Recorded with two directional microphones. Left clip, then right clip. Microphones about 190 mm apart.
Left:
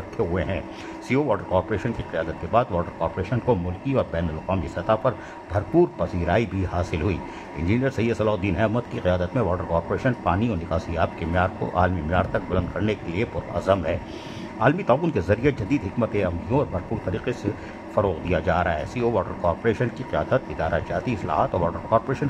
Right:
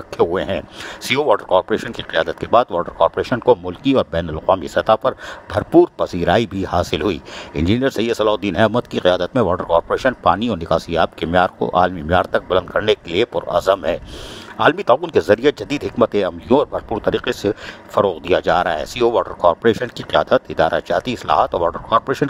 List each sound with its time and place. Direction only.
0.2 s speech: 50° right (ahead or behind)